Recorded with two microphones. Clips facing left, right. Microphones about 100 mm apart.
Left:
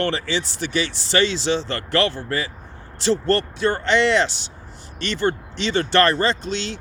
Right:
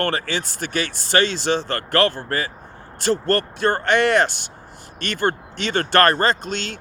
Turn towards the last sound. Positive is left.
turn(degrees=-50)  # may be behind; listen again after turning